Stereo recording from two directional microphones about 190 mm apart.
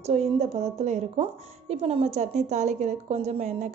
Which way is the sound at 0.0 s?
35° right (ahead or behind).